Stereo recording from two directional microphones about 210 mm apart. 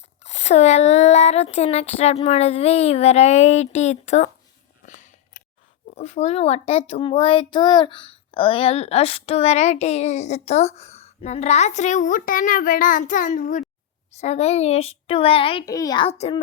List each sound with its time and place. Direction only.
0.2 s a child's voice: 30° left (ahead or behind)
4.9 s a sound: 35° left (ahead or behind)
6.0 s a child's voice: 30° left (ahead or behind)